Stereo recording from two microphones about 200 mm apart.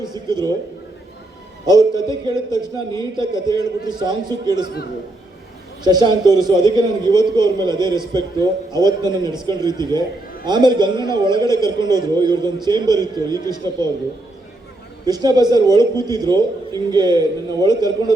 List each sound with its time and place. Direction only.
0.0 s a man's voice: 20° right (ahead or behind)
1.6 s a man's voice: 20° right (ahead or behind)
5.8 s a man's voice: 20° right (ahead or behind)
15.0 s a man's voice: 20° right (ahead or behind)